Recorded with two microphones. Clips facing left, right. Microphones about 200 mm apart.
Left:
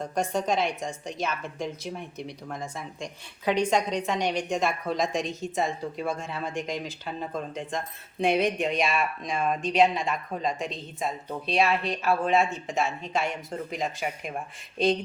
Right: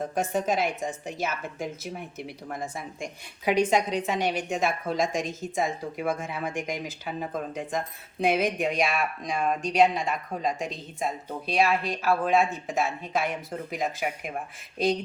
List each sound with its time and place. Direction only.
0.1 s speech: 5° right (ahead or behind)
6.2 s speech: 15° right (ahead or behind)
7.0 s speech: 5° right (ahead or behind)